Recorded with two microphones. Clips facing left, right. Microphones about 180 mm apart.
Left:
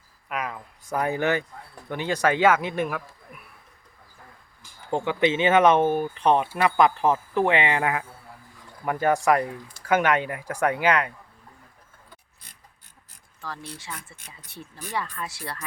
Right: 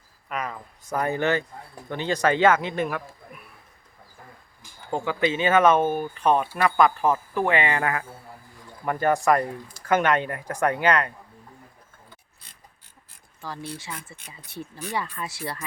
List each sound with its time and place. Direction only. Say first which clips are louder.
0.3 s speech: even; 5° left (ahead or behind)
5.0 s speech: left 2 dB; 20° left (ahead or behind)
13.4 s speech: right 3 dB; centre (ahead or behind)